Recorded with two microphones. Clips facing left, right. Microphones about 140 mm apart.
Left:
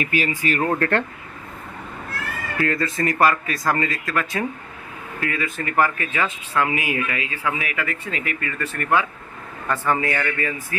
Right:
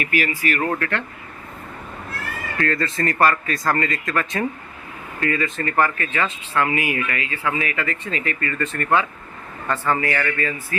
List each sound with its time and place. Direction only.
0.0 s speech: 25° left (ahead or behind)
0.8 s speech: 40° left (ahead or behind)
2.6 s speech: 10° left (ahead or behind)